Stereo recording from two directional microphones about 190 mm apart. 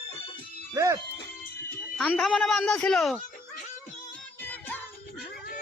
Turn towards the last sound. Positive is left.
turn(degrees=10)  # may be behind; listen again after turning